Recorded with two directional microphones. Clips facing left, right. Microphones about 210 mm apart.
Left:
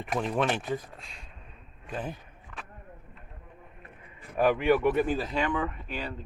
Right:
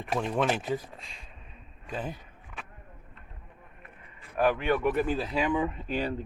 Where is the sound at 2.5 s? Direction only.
10° right (ahead or behind).